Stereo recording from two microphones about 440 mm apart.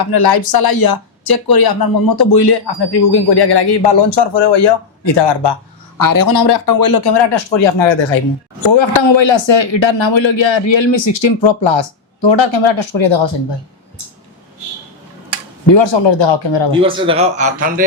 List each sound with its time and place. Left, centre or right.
0.0 s speech: left
6.0 s speech: left
15.7 s speech: left
16.8 s a man's voice: centre